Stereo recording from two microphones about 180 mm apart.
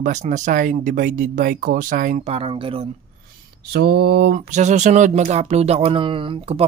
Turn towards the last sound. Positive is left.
turn(degrees=-35)  # may be behind; listen again after turning